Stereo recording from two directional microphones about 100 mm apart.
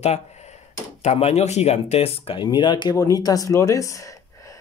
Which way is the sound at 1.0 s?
90° left.